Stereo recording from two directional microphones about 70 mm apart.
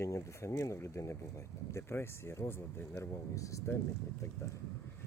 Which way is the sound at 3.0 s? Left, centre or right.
Left.